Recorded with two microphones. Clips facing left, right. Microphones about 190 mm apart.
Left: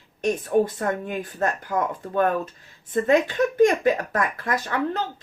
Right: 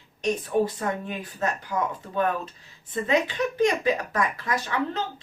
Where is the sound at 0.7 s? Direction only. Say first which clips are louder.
Left 3 dB; 50° left (ahead or behind).